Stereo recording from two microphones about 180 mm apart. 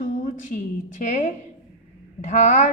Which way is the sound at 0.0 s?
45° left (ahead or behind).